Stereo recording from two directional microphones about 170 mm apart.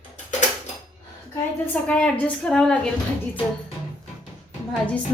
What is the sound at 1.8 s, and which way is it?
Speech, 5° left (ahead or behind).